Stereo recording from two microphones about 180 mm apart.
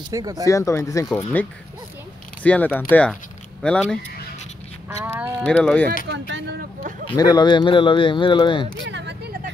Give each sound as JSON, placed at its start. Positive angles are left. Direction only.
{"t": 0.1, "sound": "speech", "side_deg": -20}
{"t": 0.5, "sound": "speech", "side_deg": 15}
{"t": 4.8, "sound": "speech", "side_deg": -10}
{"t": 5.4, "sound": "speech", "side_deg": 5}
{"t": 6.0, "sound": "speech", "side_deg": -85}
{"t": 7.1, "sound": "speech", "side_deg": 20}
{"t": 8.8, "sound": "a sound", "side_deg": -75}